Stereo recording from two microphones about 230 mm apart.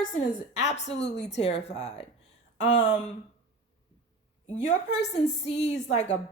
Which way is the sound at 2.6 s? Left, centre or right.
Left.